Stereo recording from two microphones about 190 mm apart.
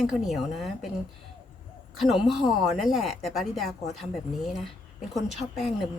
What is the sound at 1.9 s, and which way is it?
Speech, centre (ahead or behind).